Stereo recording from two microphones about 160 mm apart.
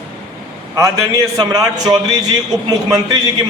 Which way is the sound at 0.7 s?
20° right (ahead or behind).